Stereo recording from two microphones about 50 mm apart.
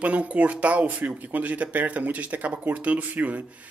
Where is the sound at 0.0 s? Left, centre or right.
Right.